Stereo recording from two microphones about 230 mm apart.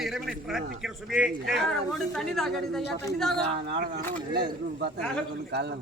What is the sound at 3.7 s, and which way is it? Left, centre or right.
Speech, right.